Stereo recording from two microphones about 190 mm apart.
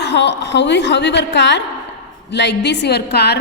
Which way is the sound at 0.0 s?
65° left (ahead or behind).